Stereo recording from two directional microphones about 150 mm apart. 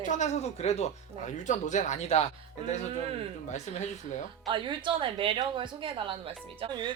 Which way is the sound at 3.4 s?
50° left (ahead or behind).